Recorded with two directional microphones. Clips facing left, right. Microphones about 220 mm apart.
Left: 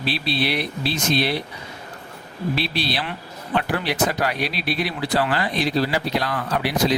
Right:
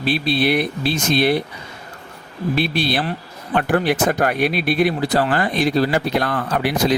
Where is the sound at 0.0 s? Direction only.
50° right (ahead or behind).